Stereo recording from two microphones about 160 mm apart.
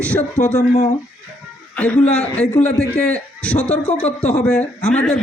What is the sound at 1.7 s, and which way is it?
A man's voice, 10° left (ahead or behind).